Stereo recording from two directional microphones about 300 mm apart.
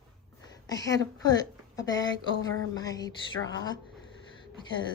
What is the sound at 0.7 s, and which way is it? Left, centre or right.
Speech, centre.